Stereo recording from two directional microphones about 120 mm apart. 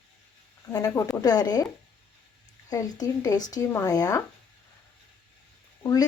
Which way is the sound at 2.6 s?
30° left (ahead or behind).